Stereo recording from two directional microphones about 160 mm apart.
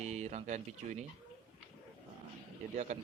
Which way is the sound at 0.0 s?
45° right (ahead or behind).